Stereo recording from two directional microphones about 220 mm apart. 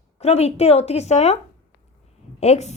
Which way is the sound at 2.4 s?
30° left (ahead or behind).